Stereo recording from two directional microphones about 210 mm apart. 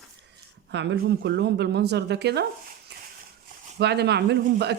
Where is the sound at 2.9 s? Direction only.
55° right (ahead or behind).